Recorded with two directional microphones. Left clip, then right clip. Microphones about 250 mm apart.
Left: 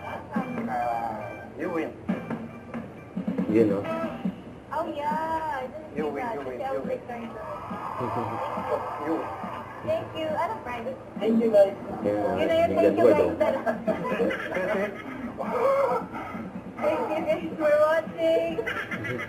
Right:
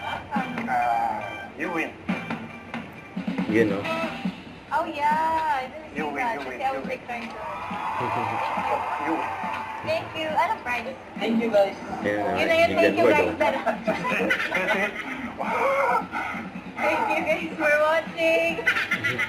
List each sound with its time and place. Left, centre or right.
0.3 s music: centre
3.5 s speech: centre
4.7 s a sound: centre
7.9 s a woman's voice: centre
15.4 s chicken: centre
16.8 s speech: centre